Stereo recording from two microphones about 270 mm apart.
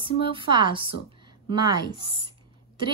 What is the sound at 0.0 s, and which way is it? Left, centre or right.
A woman's voice, centre.